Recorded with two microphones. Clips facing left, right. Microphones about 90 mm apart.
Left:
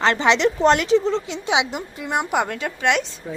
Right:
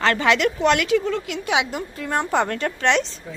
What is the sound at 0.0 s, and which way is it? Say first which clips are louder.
A woman's voice: left 1 dB; 20° left (ahead or behind).